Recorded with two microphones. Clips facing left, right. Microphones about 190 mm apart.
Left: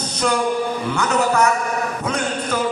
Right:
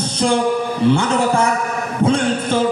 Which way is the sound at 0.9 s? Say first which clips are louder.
Right 2 dB; 30° right (ahead or behind).